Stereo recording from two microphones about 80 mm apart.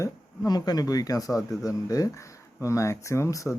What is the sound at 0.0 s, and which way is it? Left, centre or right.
Speech, left.